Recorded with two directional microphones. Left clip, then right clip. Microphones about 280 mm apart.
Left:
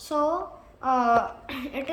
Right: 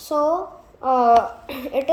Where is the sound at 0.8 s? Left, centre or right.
Left.